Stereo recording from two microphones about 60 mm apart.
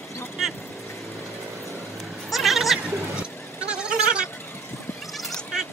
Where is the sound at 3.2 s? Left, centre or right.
Centre.